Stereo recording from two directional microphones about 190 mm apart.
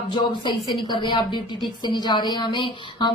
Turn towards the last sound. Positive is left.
turn(degrees=25)  # may be behind; listen again after turning